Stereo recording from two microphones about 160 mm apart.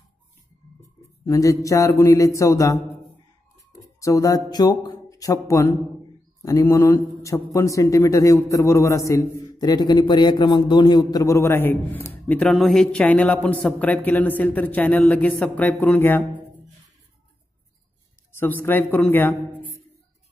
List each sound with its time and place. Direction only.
1.2 s a man's voice: 20° left (ahead or behind)
4.0 s a man's voice: 20° left (ahead or behind)
18.4 s a man's voice: 15° left (ahead or behind)